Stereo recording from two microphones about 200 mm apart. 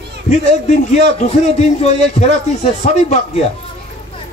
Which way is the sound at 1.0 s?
30° left (ahead or behind).